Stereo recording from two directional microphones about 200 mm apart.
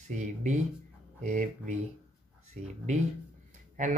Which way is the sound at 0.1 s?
35° right (ahead or behind).